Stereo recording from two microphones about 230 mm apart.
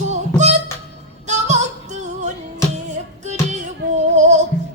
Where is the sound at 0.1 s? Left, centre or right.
Right.